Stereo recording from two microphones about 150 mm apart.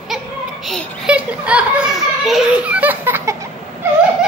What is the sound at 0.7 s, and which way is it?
A child's voice, 5° right (ahead or behind).